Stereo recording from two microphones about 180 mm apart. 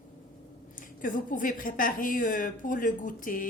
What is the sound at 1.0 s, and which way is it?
A woman's voice, 50° left (ahead or behind).